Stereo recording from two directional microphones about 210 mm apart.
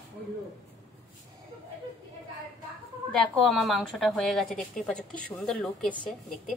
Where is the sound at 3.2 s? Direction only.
Centre (ahead or behind).